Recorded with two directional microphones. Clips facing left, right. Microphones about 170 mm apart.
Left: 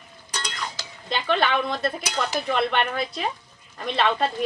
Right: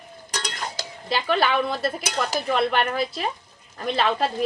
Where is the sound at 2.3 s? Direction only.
Centre (ahead or behind).